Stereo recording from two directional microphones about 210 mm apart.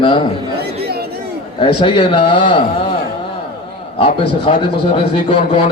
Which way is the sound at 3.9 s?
30° left (ahead or behind).